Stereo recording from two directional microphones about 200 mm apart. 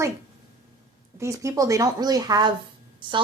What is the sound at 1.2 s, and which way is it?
Speech, 15° right (ahead or behind).